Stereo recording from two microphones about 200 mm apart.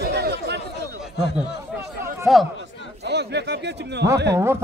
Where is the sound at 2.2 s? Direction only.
Centre (ahead or behind).